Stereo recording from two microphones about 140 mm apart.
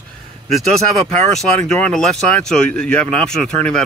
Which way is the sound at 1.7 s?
5° left (ahead or behind).